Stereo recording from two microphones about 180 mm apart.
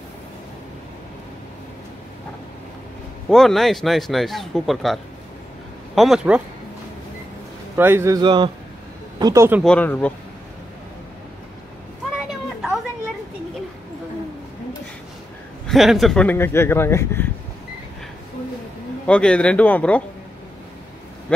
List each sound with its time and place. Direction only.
3.3 s a man's voice: centre (ahead or behind)
7.7 s a man's voice: 15° right (ahead or behind)
9.2 s a man's voice: 15° right (ahead or behind)
9.6 s speech: 5° left (ahead or behind)
12.3 s children playing: 5° right (ahead or behind)
15.6 s speech: centre (ahead or behind)
19.0 s speech: 5° left (ahead or behind)